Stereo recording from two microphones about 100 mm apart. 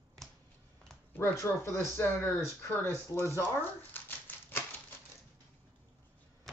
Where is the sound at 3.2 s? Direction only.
20° left (ahead or behind).